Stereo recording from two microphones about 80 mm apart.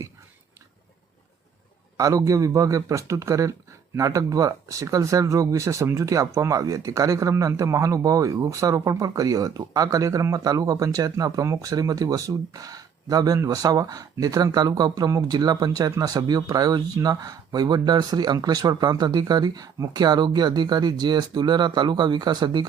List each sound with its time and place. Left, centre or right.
2.0 s speech: right